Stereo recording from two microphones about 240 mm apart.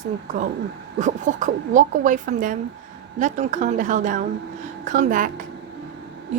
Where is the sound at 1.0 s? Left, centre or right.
Right.